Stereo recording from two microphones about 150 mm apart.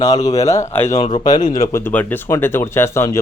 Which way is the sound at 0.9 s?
50° left (ahead or behind).